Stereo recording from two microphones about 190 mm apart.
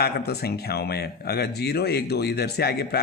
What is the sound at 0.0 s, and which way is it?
Speech, 55° left (ahead or behind).